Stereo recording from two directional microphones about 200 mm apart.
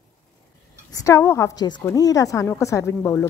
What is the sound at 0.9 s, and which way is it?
A woman's voice, 15° left (ahead or behind).